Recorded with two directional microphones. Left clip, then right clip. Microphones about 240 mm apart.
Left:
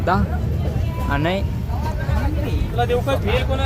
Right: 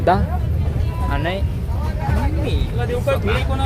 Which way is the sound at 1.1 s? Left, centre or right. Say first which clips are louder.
Left 2 dB; centre.